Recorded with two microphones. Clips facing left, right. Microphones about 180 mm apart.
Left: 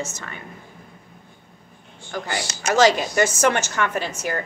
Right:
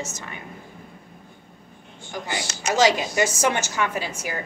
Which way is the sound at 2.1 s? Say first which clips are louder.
Left 2 dB; 15° right (ahead or behind).